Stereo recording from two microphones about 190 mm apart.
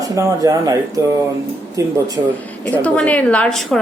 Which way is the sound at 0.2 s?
15° right (ahead or behind).